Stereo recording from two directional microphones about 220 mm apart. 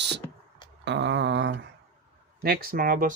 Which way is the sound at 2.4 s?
45° right (ahead or behind).